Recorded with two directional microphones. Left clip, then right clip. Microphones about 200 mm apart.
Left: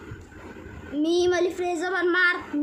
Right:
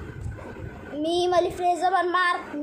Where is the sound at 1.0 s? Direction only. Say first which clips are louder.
Left 2 dB; 90° left.